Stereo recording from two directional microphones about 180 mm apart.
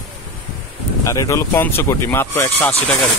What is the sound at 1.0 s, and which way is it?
Speech, 15° left (ahead or behind).